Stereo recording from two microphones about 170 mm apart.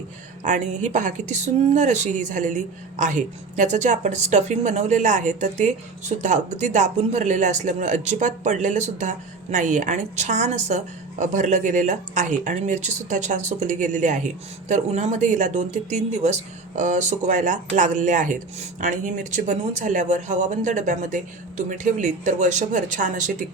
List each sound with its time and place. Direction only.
0.4 s speech: 45° right (ahead or behind)